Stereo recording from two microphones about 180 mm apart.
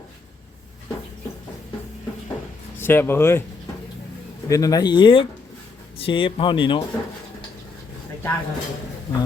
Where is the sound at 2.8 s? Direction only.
10° left (ahead or behind).